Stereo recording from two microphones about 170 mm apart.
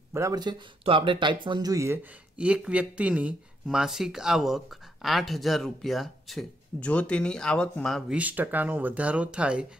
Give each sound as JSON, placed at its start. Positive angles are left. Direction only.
{"t": 0.1, "sound": "speech", "side_deg": -20}
{"t": 2.3, "sound": "speech", "side_deg": -5}
{"t": 8.2, "sound": "speech", "side_deg": -10}